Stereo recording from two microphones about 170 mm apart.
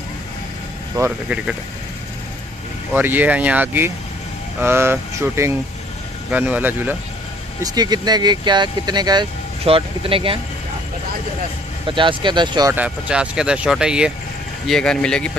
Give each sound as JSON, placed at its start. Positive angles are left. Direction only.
{"t": 0.9, "sound": "speech", "side_deg": -10}
{"t": 2.9, "sound": "speech", "side_deg": -10}
{"t": 7.6, "sound": "speech", "side_deg": -25}
{"t": 11.8, "sound": "speech", "side_deg": -30}
{"t": 12.7, "sound": "speech", "side_deg": -5}